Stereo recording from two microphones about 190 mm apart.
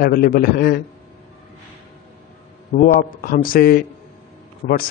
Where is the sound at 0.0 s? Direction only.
50° left (ahead or behind).